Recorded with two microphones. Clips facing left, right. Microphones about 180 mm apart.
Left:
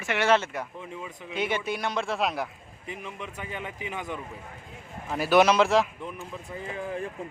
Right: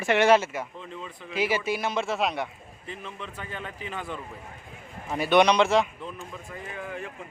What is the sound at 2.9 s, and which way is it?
A man's voice, 15° left (ahead or behind).